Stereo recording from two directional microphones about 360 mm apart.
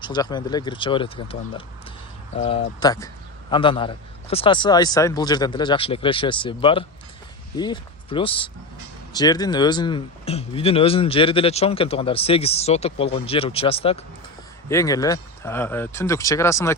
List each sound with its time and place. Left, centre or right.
0.0 s speech: centre